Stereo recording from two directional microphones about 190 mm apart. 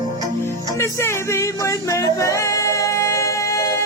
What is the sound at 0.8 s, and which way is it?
Music, 15° left (ahead or behind).